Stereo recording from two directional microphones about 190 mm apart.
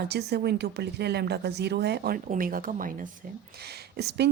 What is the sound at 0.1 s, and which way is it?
Speech, 60° right (ahead or behind).